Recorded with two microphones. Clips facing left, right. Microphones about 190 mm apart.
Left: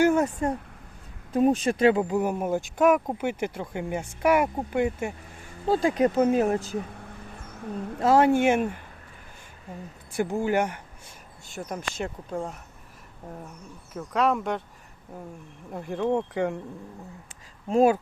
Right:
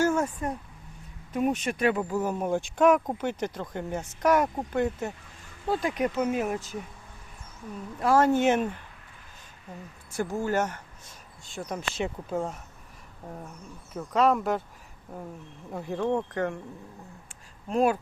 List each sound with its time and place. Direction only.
0.0 s a sound: 15° left (ahead or behind)
1.3 s speech: 30° left (ahead or behind); by 5.1 s 10° left (ahead or behind)
5.6 s speech: 30° left (ahead or behind)
8.0 s speech: 15° left (ahead or behind)
10.2 s speech: 15° left (ahead or behind)
11.5 s speech: centre (ahead or behind)
15.7 s speech: centre (ahead or behind)
16.0 s speech: 10° left (ahead or behind)